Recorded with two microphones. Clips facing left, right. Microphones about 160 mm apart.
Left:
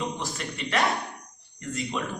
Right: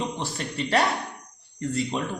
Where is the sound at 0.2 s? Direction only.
35° right (ahead or behind).